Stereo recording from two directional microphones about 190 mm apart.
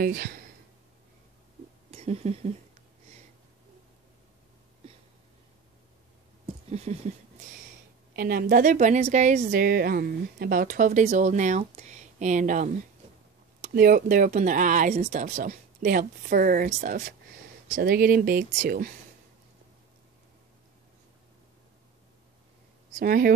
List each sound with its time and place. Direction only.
0.0 s speech: 50° right (ahead or behind)
1.9 s speech: 35° right (ahead or behind)
6.4 s a sound: 35° right (ahead or behind)
8.2 s a woman's voice: 50° right (ahead or behind)
9.6 s a woman's voice: 55° right (ahead or behind)
17.7 s speech: 50° right (ahead or behind)
22.9 s speech: 50° right (ahead or behind)